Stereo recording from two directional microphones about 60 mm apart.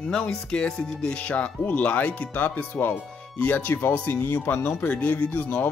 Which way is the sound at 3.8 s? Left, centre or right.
Left.